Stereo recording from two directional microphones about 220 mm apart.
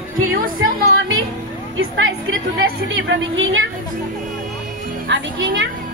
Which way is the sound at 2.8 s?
60° right (ahead or behind).